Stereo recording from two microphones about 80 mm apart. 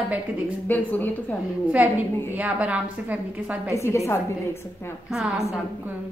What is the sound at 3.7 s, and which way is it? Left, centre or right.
Speech, left.